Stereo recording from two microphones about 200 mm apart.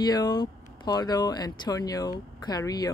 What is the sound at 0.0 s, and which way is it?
Speech, 20° left (ahead or behind).